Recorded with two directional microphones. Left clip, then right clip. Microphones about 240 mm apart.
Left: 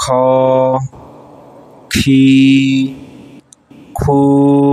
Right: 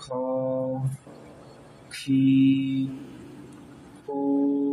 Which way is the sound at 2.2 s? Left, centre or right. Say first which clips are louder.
Left 11 dB; left.